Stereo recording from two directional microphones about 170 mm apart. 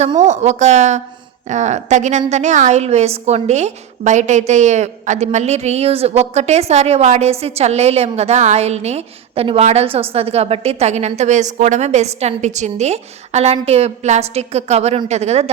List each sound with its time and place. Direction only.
0.2 s a woman's voice: 45° right (ahead or behind)